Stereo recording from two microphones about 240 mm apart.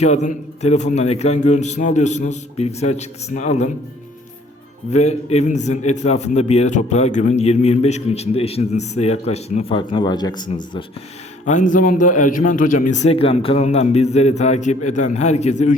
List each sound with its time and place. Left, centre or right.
0.0 s a man's voice: left
4.9 s a man's voice: left
11.4 s a man's voice: left